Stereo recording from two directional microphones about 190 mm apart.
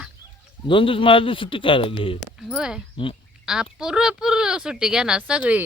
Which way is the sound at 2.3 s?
Centre (ahead or behind).